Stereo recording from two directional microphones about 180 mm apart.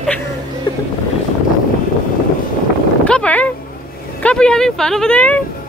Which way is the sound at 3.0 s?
5° left (ahead or behind).